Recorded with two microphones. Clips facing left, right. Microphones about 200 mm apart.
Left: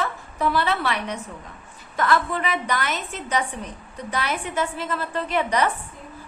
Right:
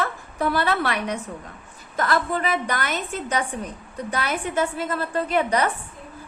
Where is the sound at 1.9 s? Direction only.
40° right (ahead or behind).